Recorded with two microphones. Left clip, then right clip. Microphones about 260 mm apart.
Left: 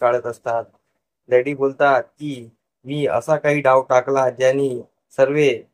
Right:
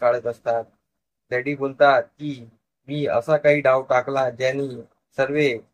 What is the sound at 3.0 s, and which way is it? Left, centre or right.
Speech, left.